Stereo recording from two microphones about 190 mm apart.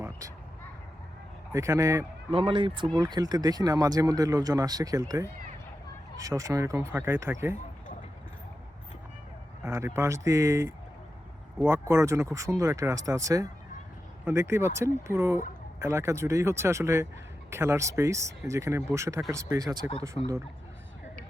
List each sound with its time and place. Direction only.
1.5 s speech: 15° right (ahead or behind)
2.3 s speech: 30° right (ahead or behind)
9.6 s speech: 15° right (ahead or behind)